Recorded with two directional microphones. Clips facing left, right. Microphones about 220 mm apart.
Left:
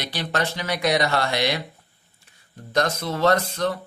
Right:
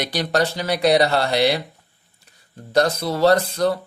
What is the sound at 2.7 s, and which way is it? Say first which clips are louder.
A man's voice: right 5 dB; 35° right (ahead or behind).